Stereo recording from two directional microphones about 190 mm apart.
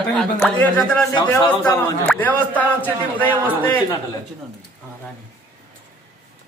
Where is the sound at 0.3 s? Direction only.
5° left (ahead or behind).